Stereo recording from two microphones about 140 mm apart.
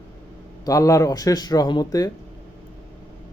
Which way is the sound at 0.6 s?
25° left (ahead or behind).